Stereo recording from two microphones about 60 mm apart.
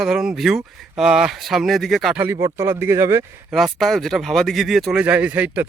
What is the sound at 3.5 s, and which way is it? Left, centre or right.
Speech, centre.